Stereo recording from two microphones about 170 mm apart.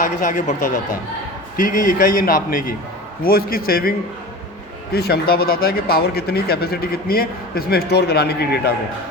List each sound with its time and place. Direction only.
0.0 s speech: 55° left (ahead or behind); by 8.7 s 70° left (ahead or behind)